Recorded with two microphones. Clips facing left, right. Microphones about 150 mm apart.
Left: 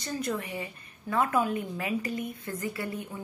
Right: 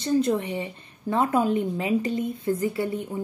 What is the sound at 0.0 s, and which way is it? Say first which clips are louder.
A woman's voice: right 10 dB; 25° right (ahead or behind).